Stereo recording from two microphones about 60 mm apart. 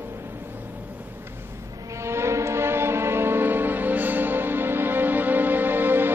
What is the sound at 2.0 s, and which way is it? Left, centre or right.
Music, right.